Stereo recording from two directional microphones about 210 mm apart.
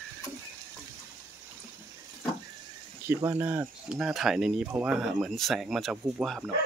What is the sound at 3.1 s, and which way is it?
Speech, 15° right (ahead or behind).